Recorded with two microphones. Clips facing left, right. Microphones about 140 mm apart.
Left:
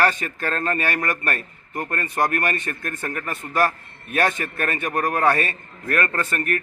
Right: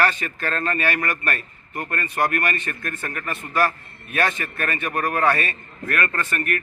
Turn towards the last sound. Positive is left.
turn(degrees=35)  # may be behind; listen again after turning